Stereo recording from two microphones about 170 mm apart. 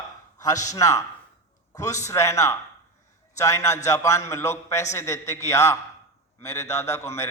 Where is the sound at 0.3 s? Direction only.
20° left (ahead or behind).